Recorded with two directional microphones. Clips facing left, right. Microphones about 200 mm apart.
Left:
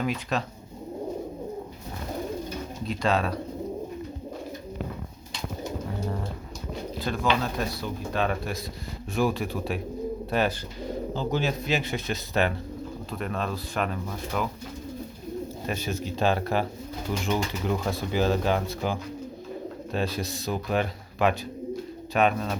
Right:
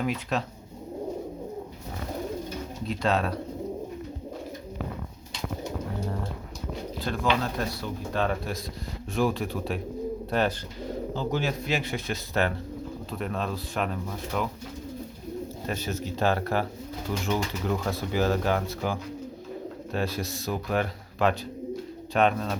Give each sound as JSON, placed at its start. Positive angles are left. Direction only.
{"t": 0.0, "sound": "speech", "side_deg": -5}
{"t": 2.8, "sound": "speech", "side_deg": 0}
{"t": 7.0, "sound": "speech", "side_deg": 5}
{"t": 11.1, "sound": "speech", "side_deg": 20}
{"t": 13.1, "sound": "speech", "side_deg": 0}
{"t": 15.6, "sound": "speech", "side_deg": 10}
{"t": 22.1, "sound": "speech", "side_deg": 5}